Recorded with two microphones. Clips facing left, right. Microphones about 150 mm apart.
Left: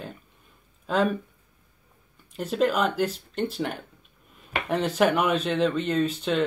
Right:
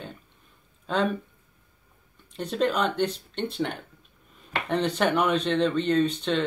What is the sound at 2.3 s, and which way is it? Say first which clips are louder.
Speech: left 2 dB; 5° left (ahead or behind).